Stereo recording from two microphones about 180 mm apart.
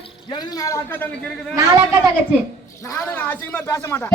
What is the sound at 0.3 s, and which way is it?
Speech, 20° left (ahead or behind).